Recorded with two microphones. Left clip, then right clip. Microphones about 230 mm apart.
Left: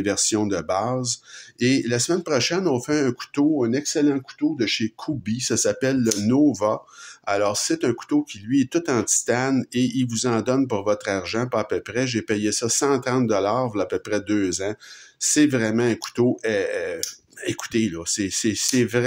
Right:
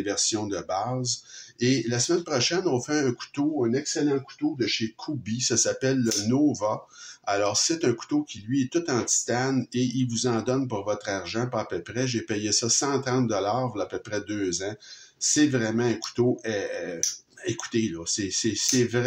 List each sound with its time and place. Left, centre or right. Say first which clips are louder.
0.0 s speech: left 5 dB; left